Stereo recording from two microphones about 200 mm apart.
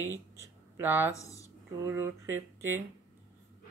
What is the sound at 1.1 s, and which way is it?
Speech, 15° left (ahead or behind).